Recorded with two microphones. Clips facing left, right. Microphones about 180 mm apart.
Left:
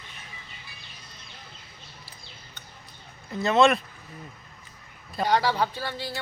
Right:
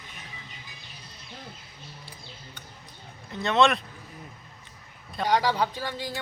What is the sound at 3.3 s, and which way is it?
Speech, centre (ahead or behind).